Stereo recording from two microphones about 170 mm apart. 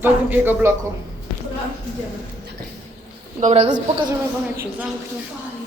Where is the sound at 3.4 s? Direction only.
35° right (ahead or behind).